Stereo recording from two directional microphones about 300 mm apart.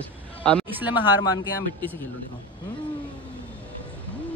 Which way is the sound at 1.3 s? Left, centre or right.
Centre.